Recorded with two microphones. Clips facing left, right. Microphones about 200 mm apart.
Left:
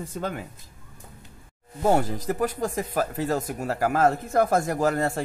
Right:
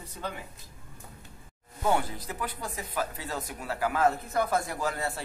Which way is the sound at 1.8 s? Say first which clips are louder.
Left 6 dB; 45° left (ahead or behind).